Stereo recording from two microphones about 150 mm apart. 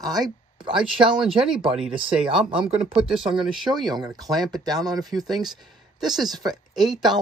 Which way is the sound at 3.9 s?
25° right (ahead or behind).